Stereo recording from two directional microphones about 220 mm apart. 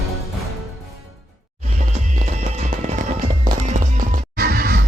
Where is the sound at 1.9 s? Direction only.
35° right (ahead or behind).